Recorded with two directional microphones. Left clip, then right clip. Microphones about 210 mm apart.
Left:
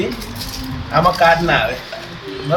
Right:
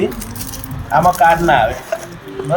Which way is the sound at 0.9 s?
5° right (ahead or behind).